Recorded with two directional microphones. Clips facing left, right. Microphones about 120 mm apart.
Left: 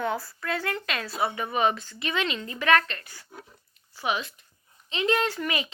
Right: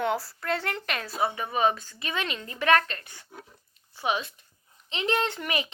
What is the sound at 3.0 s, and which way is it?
Speech, 25° right (ahead or behind).